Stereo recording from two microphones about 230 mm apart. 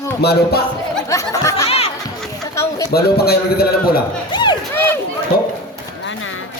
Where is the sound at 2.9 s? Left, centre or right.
Left.